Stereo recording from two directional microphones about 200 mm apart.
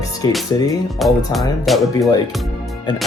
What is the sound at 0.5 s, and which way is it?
Speech, 15° left (ahead or behind).